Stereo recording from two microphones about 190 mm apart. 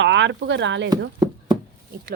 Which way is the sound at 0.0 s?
70° right (ahead or behind).